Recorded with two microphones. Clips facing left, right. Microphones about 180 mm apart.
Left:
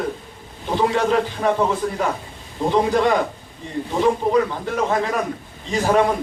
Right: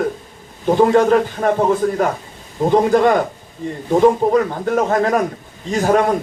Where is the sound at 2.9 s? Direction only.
50° right (ahead or behind).